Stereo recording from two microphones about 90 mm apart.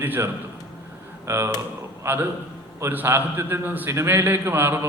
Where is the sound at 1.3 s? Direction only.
25° right (ahead or behind).